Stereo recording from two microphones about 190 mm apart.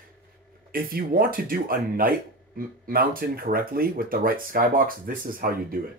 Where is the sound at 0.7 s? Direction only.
50° right (ahead or behind).